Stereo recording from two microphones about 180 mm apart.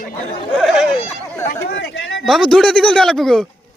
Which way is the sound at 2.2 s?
5° left (ahead or behind).